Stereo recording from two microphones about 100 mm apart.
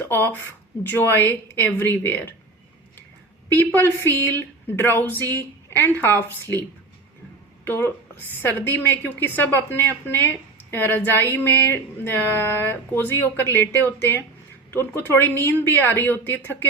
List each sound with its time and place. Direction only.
0.0 s speech: 25° left (ahead or behind)
3.5 s speech: 20° left (ahead or behind)